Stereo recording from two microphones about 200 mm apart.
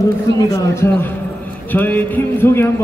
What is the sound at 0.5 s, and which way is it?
A man's voice, 10° left (ahead or behind).